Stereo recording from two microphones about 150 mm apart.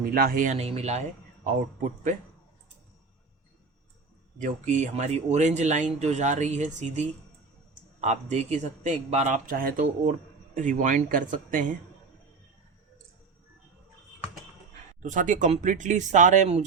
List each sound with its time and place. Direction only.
0.0 s speech: 75° right (ahead or behind); by 1.0 s 45° right (ahead or behind)
4.4 s speech: 55° right (ahead or behind)
15.0 s speech: 60° right (ahead or behind)